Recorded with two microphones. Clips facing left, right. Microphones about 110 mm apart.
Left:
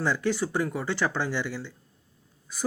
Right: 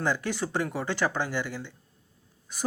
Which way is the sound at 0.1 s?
20° right (ahead or behind).